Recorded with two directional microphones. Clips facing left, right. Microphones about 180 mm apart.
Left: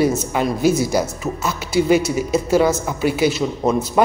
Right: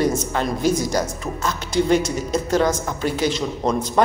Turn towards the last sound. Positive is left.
turn(degrees=5)  # may be behind; listen again after turning